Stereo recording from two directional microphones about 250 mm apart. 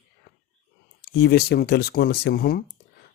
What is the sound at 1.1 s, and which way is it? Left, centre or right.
Speech, left.